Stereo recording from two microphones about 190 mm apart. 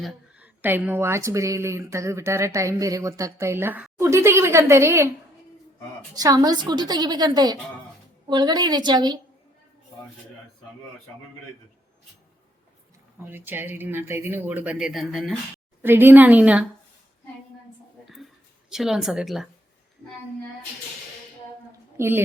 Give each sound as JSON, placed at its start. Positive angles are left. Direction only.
{"t": 0.0, "sound": "speech", "side_deg": -5}
{"t": 6.1, "sound": "a woman's voice", "side_deg": -20}
{"t": 13.2, "sound": "speech", "side_deg": -10}
{"t": 15.8, "sound": "speech", "side_deg": -10}
{"t": 18.7, "sound": "speech", "side_deg": 0}
{"t": 21.9, "sound": "a woman's voice", "side_deg": -10}